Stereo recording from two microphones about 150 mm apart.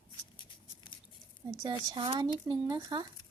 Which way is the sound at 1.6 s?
30° right (ahead or behind).